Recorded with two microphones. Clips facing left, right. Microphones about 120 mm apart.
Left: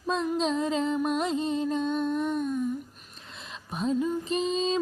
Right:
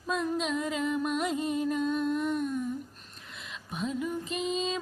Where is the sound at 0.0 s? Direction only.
30° left (ahead or behind).